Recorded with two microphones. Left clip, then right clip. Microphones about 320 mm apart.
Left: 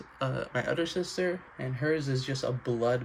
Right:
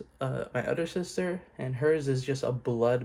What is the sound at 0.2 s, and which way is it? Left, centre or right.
Speech, centre.